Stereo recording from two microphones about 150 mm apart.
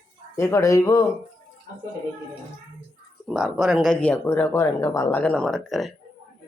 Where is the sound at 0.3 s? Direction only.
20° left (ahead or behind).